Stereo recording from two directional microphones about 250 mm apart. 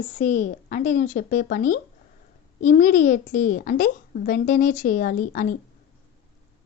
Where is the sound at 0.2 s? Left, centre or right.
Left.